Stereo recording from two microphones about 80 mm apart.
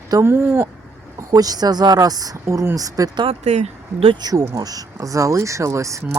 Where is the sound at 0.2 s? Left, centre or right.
Right.